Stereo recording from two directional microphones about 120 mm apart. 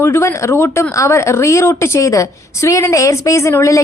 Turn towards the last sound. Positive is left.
turn(degrees=25)  # may be behind; listen again after turning